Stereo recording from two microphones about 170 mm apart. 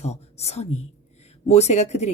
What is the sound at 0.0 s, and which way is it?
A woman's voice, 40° left (ahead or behind).